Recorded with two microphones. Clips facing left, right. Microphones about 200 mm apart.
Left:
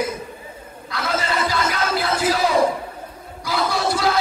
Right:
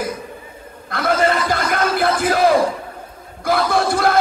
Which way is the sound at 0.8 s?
55° right (ahead or behind).